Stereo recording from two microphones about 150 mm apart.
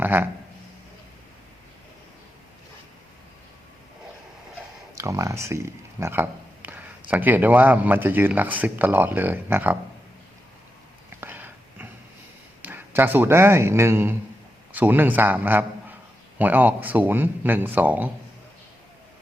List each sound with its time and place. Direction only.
0.0 s speech: 15° right (ahead or behind)
4.9 s speech: 20° right (ahead or behind)
11.2 s a sound: 15° right (ahead or behind)
12.6 s a man's voice: 15° right (ahead or behind)